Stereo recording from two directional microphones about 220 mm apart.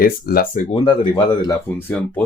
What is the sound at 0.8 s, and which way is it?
Speech, 20° left (ahead or behind).